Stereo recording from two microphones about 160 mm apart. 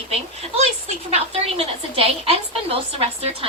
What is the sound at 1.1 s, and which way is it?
A woman's voice, 40° right (ahead or behind).